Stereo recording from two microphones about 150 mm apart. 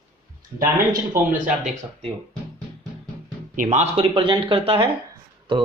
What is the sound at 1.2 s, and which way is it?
Speech, 70° right (ahead or behind).